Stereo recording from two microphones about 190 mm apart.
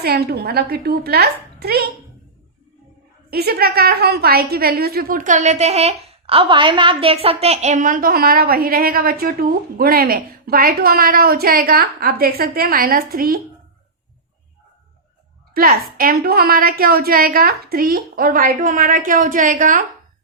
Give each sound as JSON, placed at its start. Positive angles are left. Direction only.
{"t": 0.0, "sound": "a woman's voice", "side_deg": -55}
{"t": 3.2, "sound": "a woman's voice", "side_deg": -55}
{"t": 15.5, "sound": "a woman's voice", "side_deg": -50}